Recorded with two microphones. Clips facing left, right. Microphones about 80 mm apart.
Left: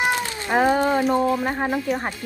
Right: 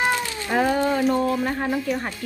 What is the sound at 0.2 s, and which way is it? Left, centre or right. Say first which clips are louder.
Cat: left 2 dB; left.